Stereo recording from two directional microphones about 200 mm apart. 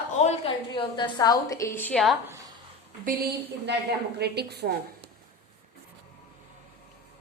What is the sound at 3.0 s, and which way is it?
A woman's voice, 50° right (ahead or behind).